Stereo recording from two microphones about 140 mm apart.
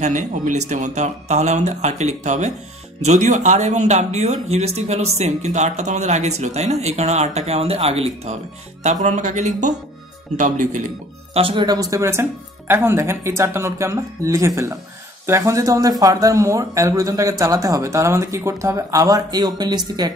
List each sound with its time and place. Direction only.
0.0 s speech: 60° right (ahead or behind)
9.0 s speech: 60° right (ahead or behind)
11.3 s speech: 40° right (ahead or behind)